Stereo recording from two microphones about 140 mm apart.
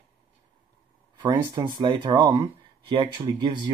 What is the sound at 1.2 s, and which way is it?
Speech, 30° right (ahead or behind).